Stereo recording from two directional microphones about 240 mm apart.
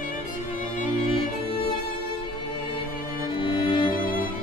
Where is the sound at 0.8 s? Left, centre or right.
Left.